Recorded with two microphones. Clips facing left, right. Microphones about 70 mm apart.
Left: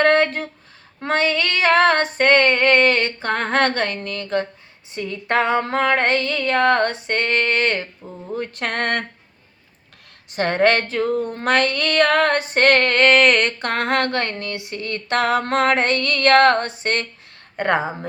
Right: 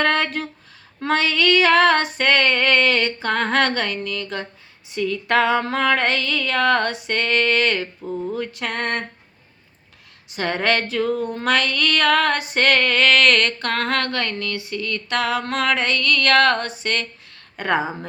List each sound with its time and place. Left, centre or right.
0.0 s speech: left
1.0 s female singing: left
8.3 s a sound: left
10.3 s female singing: left